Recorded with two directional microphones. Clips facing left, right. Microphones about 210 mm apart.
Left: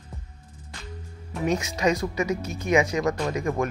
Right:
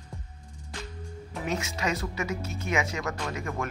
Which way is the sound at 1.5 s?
15° left (ahead or behind).